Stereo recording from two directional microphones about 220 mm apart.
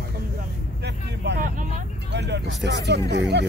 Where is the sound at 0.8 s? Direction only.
50° right (ahead or behind).